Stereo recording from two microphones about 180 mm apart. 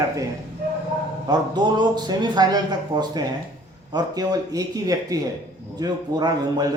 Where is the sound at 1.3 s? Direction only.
25° right (ahead or behind).